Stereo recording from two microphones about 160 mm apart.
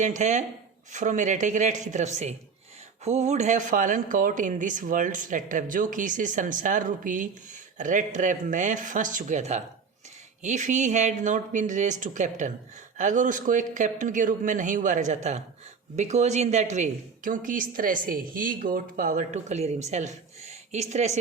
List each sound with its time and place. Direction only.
0.0 s speech: 50° right (ahead or behind)